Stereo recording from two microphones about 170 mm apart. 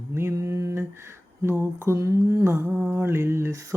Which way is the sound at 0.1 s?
15° right (ahead or behind).